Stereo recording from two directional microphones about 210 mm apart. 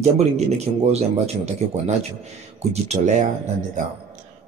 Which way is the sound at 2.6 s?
35° right (ahead or behind).